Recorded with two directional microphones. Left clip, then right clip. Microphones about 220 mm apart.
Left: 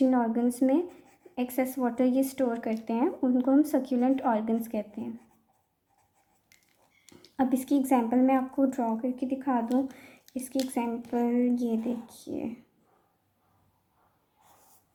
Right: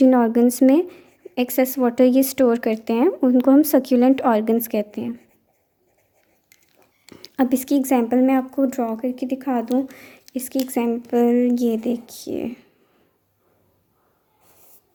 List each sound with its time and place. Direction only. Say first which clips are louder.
0.0 s speech: right 10 dB; 45° right (ahead or behind)
7.1 s speech: right 8 dB; 45° right (ahead or behind)